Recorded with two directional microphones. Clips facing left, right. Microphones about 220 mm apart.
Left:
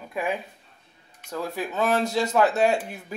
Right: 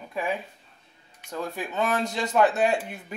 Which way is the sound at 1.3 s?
5° left (ahead or behind).